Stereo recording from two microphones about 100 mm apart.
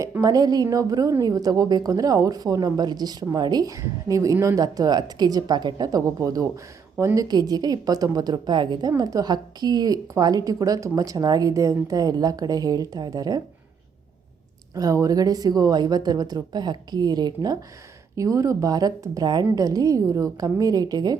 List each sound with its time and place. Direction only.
0.2 s a woman's voice: 40° right (ahead or behind)
7.3 s a woman's voice: 40° right (ahead or behind)
8.9 s a woman's voice: 35° right (ahead or behind)
14.8 s a woman's voice: 35° right (ahead or behind)